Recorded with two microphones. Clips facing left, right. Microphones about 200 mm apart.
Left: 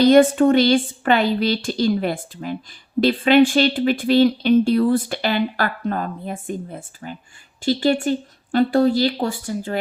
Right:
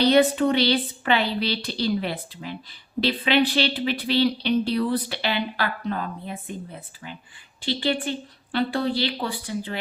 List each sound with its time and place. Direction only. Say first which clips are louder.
0.0 s speech: left 6 dB; 50° left (ahead or behind)